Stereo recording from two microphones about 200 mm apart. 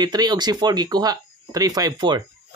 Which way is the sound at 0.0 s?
20° right (ahead or behind).